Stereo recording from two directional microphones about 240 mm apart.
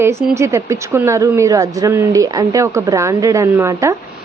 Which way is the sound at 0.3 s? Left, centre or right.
Centre.